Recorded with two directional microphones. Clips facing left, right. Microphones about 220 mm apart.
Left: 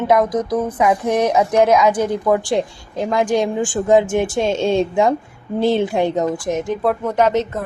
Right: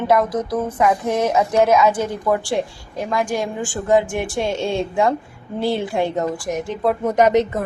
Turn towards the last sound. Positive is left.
turn(degrees=-10)  # may be behind; listen again after turning